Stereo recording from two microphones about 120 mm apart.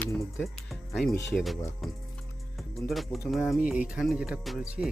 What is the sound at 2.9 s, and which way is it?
Speech, centre (ahead or behind).